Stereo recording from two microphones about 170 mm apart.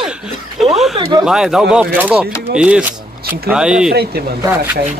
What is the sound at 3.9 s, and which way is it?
Speech, 65° right (ahead or behind).